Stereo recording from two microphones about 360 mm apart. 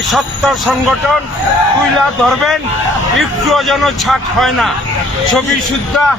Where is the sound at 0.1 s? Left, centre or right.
Centre.